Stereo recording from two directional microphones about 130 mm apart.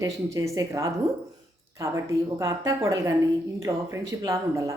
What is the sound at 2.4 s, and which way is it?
Speech, 25° right (ahead or behind).